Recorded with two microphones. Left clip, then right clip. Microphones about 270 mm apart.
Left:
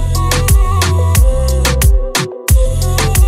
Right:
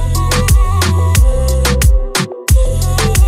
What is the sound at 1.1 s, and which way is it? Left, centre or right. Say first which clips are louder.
Music: even; centre.